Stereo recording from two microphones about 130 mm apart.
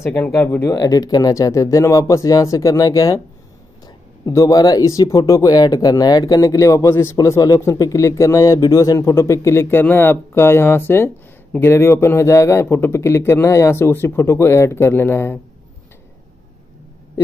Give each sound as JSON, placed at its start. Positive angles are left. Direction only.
{"t": 0.0, "sound": "speech", "side_deg": 15}
{"t": 0.7, "sound": "speech", "side_deg": 25}